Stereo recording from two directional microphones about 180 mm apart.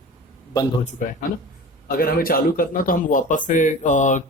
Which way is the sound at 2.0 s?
55° left (ahead or behind).